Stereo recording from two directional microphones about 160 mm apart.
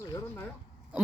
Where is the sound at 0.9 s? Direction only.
10° right (ahead or behind).